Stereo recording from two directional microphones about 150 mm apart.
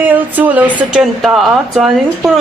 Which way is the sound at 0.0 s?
10° right (ahead or behind).